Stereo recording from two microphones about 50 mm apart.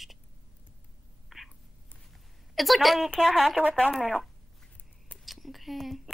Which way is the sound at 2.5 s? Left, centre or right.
Centre.